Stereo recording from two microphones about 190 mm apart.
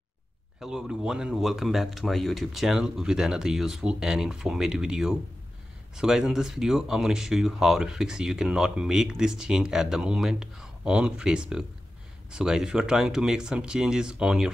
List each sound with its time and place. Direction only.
0.6 s speech: 5° right (ahead or behind)